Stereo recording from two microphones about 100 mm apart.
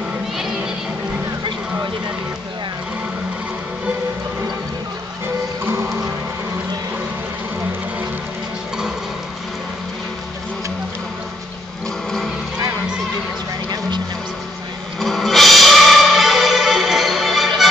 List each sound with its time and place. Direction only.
13.7 s music: 45° right (ahead or behind)
15.0 s music: centre (ahead or behind)